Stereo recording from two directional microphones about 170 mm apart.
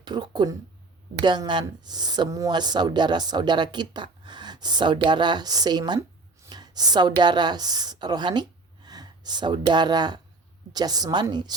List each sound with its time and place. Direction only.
0.0 s speech: 25° right (ahead or behind)